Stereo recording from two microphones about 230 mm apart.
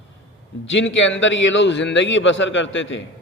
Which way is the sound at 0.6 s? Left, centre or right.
Left.